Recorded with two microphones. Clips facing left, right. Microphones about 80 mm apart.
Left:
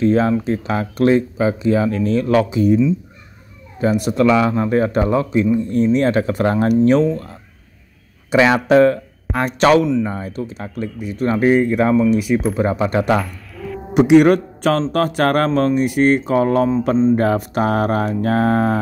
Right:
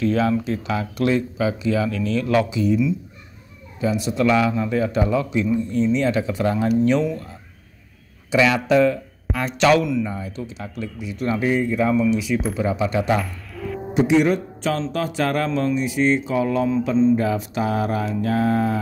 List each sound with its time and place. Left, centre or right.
0.0 s speech: left
3.8 s speech: left
8.3 s speech: left
13.2 s owl: centre
13.9 s speech: left
16.9 s speech: left
17.2 s speech: left